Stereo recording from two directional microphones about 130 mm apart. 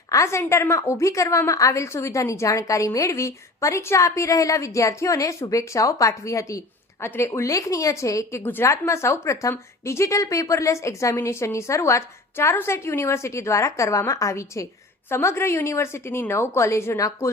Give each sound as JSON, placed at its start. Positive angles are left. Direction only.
{"t": 0.1, "sound": "a woman's voice", "side_deg": 25}